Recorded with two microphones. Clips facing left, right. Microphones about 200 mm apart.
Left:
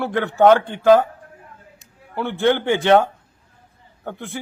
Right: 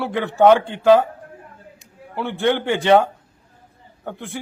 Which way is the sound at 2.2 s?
10° right (ahead or behind).